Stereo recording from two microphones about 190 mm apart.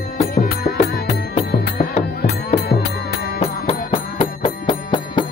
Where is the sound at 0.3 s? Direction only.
50° left (ahead or behind).